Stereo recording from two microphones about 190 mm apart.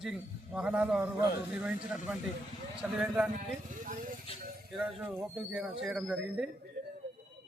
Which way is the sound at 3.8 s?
45° right (ahead or behind).